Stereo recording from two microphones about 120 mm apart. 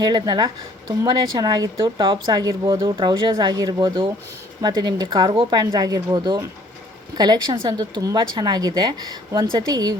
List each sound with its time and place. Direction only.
0.0 s speech: 35° right (ahead or behind)
1.8 s a woman's voice: 45° right (ahead or behind)
2.2 s speech: 30° right (ahead or behind)